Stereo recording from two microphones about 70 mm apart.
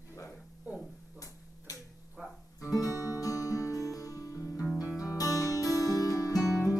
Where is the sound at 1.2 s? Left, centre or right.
Left.